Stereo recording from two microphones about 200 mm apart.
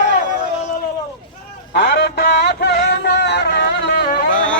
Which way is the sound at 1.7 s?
55° left (ahead or behind).